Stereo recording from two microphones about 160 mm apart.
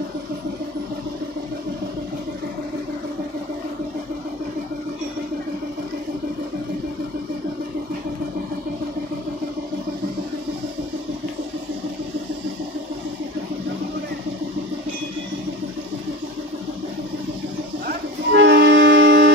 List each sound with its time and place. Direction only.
17.8 s music: 90° right